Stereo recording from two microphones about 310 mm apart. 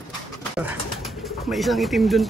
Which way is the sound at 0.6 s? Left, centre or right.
Centre.